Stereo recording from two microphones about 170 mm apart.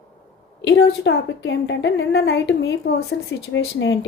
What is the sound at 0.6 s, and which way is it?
A woman's voice, 85° left.